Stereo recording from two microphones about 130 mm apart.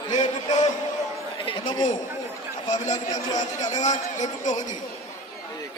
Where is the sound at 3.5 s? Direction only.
70° left (ahead or behind).